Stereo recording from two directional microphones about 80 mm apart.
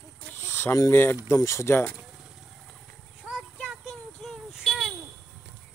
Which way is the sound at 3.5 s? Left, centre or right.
Centre.